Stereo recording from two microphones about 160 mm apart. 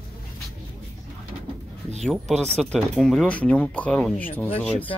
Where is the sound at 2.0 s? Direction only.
Centre (ahead or behind).